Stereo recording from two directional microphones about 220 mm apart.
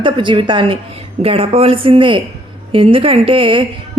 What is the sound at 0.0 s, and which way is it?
A woman's voice, 20° right (ahead or behind).